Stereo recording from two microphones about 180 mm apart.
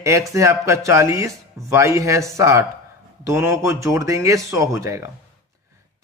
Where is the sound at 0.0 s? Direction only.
15° right (ahead or behind).